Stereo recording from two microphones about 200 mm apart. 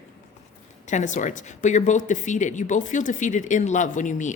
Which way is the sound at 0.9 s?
40° left (ahead or behind).